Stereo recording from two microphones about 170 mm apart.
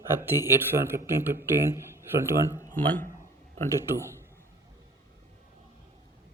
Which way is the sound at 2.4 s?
15° left (ahead or behind).